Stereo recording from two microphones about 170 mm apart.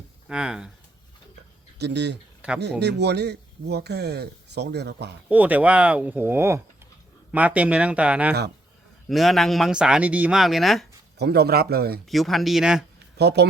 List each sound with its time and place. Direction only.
0.3 s speech: 5° right (ahead or behind)
1.8 s speech: 85° right
5.3 s speech: 10° right (ahead or behind)
11.2 s speech: 70° right (ahead or behind)
12.0 s speech: centre (ahead or behind)
13.1 s speech: 75° right (ahead or behind)